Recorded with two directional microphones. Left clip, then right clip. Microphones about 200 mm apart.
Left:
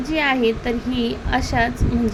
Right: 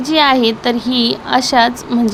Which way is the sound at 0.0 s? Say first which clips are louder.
Right 7 dB; 15° right (ahead or behind).